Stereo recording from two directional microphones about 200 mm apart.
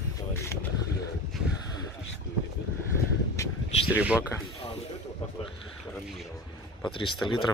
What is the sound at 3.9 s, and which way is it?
Speech, 5° right (ahead or behind).